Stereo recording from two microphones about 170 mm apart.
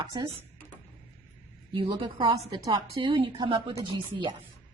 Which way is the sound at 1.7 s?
30° right (ahead or behind).